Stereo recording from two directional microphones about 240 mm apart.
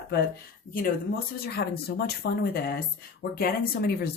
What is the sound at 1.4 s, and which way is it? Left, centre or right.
Speech, left.